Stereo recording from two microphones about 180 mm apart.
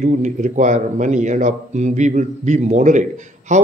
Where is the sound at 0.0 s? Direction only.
40° right (ahead or behind).